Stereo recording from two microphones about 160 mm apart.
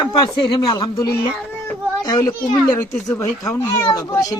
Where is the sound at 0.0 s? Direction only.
30° left (ahead or behind).